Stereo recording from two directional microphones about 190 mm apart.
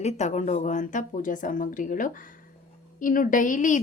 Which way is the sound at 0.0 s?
35° left (ahead or behind).